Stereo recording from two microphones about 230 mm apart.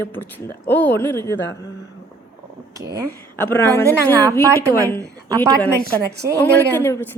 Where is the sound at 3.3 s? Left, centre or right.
Centre.